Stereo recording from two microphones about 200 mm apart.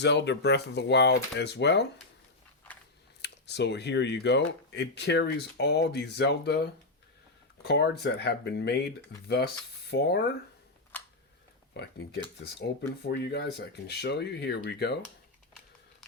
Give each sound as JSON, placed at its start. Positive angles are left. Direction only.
{"t": 0.0, "sound": "speech", "side_deg": 60}
{"t": 3.2, "sound": "speech", "side_deg": 60}
{"t": 10.9, "sound": "a sound", "side_deg": 10}
{"t": 11.7, "sound": "speech", "side_deg": 55}